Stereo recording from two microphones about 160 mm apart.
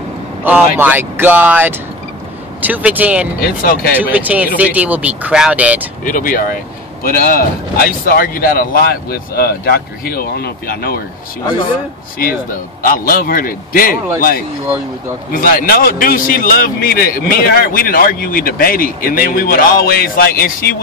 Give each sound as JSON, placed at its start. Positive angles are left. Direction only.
{"t": 0.4, "sound": "speech", "side_deg": -10}
{"t": 3.3, "sound": "speech", "side_deg": 70}
{"t": 3.9, "sound": "speech", "side_deg": -10}
{"t": 6.0, "sound": "a man's voice", "side_deg": 60}
{"t": 12.8, "sound": "a man's voice", "side_deg": 60}
{"t": 15.3, "sound": "a man's voice", "side_deg": 60}